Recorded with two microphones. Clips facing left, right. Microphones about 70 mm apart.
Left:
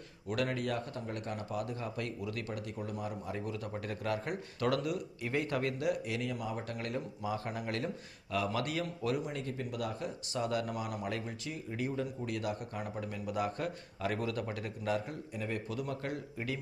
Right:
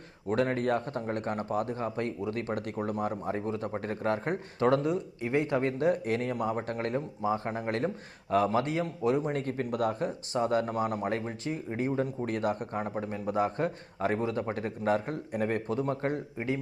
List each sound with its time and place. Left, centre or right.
0.3 s speech: right
5.7 s speech: right
9.2 s speech: right